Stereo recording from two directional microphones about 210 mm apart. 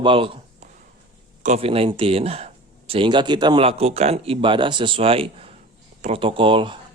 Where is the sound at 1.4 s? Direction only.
30° right (ahead or behind).